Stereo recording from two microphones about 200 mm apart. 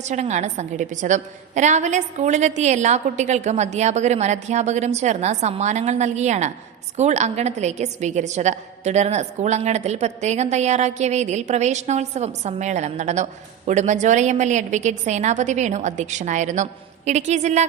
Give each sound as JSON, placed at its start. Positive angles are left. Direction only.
{"t": 0.0, "sound": "a woman's voice", "side_deg": -35}